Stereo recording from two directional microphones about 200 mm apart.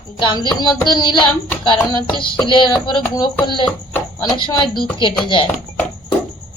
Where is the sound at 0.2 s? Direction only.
20° left (ahead or behind).